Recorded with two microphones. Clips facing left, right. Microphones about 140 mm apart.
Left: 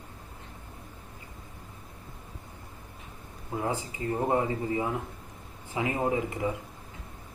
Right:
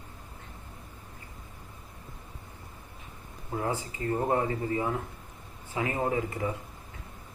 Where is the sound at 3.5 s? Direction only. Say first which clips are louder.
Even; 20° left (ahead or behind).